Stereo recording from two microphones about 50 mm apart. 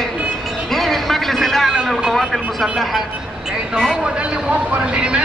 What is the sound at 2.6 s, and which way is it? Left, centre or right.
Speech, centre.